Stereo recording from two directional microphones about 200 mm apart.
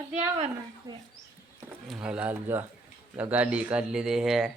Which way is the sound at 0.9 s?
15° right (ahead or behind).